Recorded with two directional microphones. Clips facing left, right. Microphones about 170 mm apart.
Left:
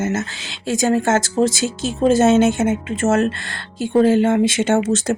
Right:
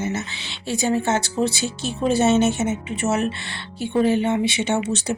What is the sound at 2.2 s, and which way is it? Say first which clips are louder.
A woman's voice: left 4 dB; 90° left.